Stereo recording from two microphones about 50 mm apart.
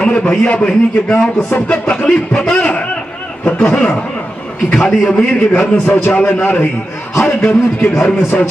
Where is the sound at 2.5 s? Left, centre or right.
Left.